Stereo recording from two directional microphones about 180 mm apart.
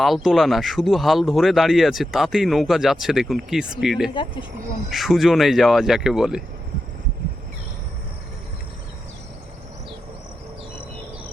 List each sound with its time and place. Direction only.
0.0 s speech: centre (ahead or behind)
4.1 s speech: 25° left (ahead or behind)
4.9 s speech: centre (ahead or behind)